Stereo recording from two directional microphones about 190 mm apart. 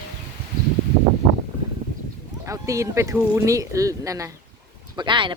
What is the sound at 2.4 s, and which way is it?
Speech, 15° right (ahead or behind).